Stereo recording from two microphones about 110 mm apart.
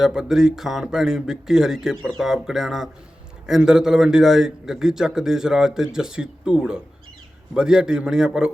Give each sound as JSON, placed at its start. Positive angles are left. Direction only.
{"t": 0.0, "sound": "a man's voice", "side_deg": -5}